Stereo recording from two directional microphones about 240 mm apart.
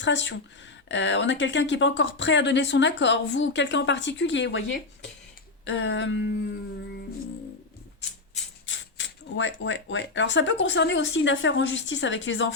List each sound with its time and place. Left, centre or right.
0.0 s speech: left
5.6 s speech: left
8.6 s speech: left